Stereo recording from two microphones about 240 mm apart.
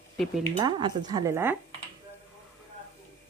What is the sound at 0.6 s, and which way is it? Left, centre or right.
Speech, centre.